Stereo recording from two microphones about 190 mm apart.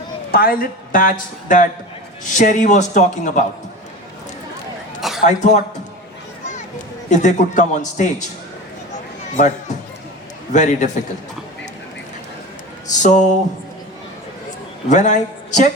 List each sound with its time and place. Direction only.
0.3 s speech: 50° left (ahead or behind)
4.9 s a sound: centre (ahead or behind)
5.2 s speech: 40° left (ahead or behind)
7.1 s speech: 40° left (ahead or behind)
9.3 s speech: 40° left (ahead or behind)
13.0 s speech: 40° left (ahead or behind)
14.8 s a man's voice: 40° left (ahead or behind)